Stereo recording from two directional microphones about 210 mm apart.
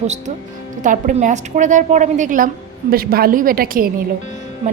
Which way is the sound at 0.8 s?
35° right (ahead or behind).